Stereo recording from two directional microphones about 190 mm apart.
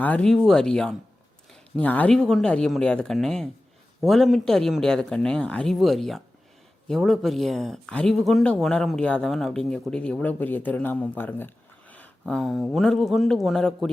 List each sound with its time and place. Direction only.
0.0 s speech: 5° left (ahead or behind)